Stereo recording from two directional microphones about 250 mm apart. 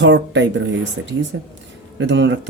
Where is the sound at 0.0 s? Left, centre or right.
Right.